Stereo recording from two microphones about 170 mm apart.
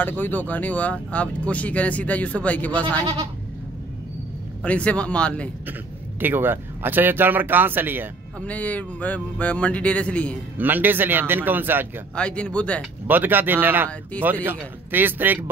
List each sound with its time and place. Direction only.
0.0 s speech: 10° left (ahead or behind)
4.6 s speech: 5° left (ahead or behind)
5.7 s speech: 10° right (ahead or behind)
8.4 s speech: 10° left (ahead or behind)
10.6 s speech: 10° right (ahead or behind)
12.2 s speech: 5° left (ahead or behind)
13.0 s speech: 10° right (ahead or behind)